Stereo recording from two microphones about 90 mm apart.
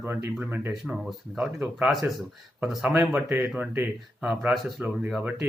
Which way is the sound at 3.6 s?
20° right (ahead or behind).